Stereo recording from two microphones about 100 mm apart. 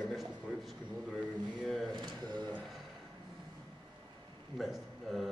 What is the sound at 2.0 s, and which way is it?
Speech, 50° right (ahead or behind).